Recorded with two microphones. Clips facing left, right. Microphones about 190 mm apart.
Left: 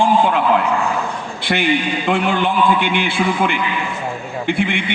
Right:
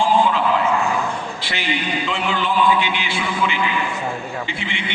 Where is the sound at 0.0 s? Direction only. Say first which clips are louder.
Left 2 dB; 55° left (ahead or behind).